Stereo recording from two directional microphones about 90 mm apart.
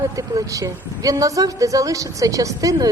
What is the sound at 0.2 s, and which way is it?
Speech, 40° right (ahead or behind).